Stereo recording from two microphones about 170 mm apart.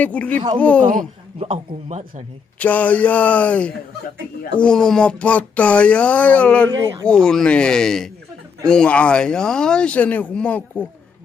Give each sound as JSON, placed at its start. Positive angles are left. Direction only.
{"t": 0.0, "sound": "speech", "side_deg": 10}
{"t": 1.4, "sound": "a man's voice", "side_deg": -40}
{"t": 2.6, "sound": "speech", "side_deg": 10}
{"t": 6.8, "sound": "speech", "side_deg": -20}
{"t": 7.1, "sound": "speech", "side_deg": 5}